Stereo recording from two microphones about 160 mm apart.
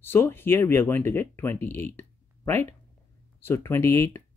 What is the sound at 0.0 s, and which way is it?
Speech, 15° left (ahead or behind).